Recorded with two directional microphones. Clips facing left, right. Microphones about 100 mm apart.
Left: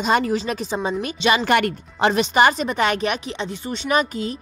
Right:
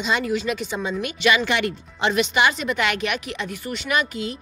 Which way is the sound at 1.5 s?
50° left (ahead or behind).